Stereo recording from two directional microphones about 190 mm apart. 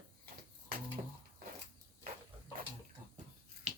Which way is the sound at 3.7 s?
35° right (ahead or behind).